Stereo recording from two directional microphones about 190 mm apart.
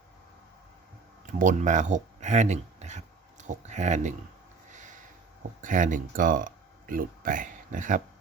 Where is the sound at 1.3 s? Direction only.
40° right (ahead or behind).